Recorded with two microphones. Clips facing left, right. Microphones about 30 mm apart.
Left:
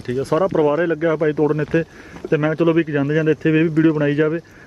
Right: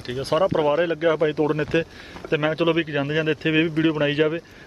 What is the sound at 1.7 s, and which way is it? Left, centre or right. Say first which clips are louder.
Speech: left 1 dB; right.